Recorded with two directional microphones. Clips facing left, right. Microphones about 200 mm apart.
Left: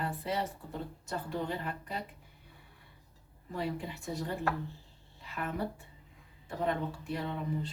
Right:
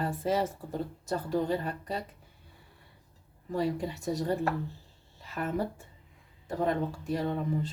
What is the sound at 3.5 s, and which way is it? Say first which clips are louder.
Speech: right 6 dB; 40° right (ahead or behind).